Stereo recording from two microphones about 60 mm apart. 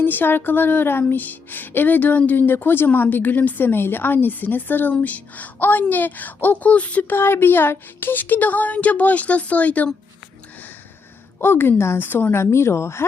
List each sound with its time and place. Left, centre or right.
0.0 s speech: left
7.2 s speech: left
11.3 s a woman's voice: left